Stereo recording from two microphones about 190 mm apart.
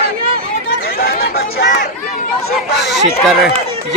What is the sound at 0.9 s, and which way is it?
Chatter, 55° left (ahead or behind).